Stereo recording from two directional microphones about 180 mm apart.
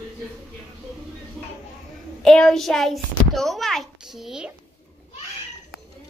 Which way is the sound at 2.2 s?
Centre (ahead or behind).